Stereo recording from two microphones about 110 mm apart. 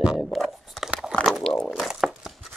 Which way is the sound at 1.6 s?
5° right (ahead or behind).